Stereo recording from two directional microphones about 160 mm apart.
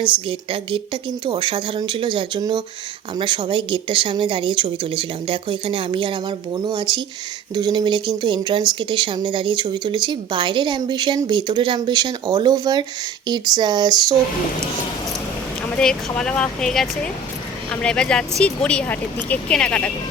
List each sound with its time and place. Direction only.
0.0 s a woman's voice: 30° right (ahead or behind)
15.8 s speech: 5° left (ahead or behind)